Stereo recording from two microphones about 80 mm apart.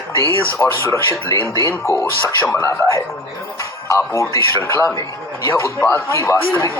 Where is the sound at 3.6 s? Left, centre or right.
Left.